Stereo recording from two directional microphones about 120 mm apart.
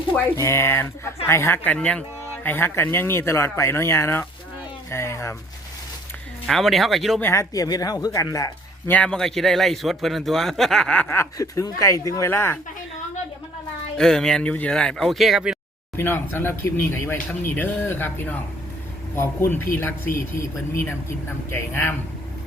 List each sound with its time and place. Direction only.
0.3 s speech: 25° left (ahead or behind)
6.5 s speech: centre (ahead or behind)
7.2 s speech: 20° left (ahead or behind)
8.9 s a man's voice: 10° left (ahead or behind)
13.9 s speech: 5° left (ahead or behind)
16.0 s a man's voice: 20° left (ahead or behind)
21.5 s a man's voice: 15° left (ahead or behind)